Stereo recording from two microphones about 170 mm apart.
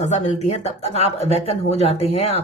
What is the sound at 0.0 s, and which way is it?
Speech, 45° left (ahead or behind).